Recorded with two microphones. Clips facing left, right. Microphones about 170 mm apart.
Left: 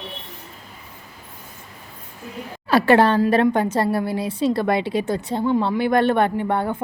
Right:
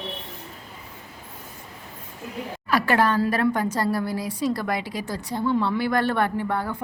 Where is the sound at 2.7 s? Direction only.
30° left (ahead or behind).